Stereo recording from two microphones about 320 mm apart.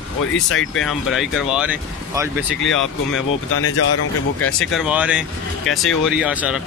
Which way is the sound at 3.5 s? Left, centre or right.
Left.